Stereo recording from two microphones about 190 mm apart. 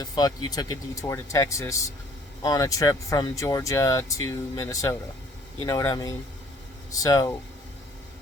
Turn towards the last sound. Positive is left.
turn(degrees=20)  # may be behind; listen again after turning